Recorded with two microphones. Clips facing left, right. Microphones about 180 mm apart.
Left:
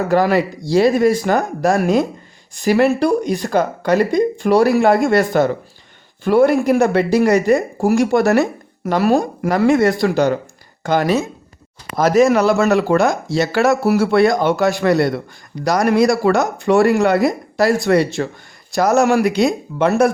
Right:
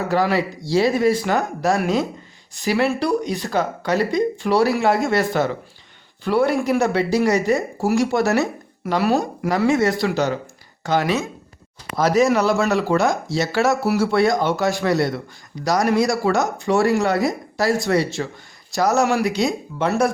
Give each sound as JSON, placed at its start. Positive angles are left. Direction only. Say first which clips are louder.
{"t": 0.1, "sound": "speech", "louder": "left 4 dB", "side_deg": 50}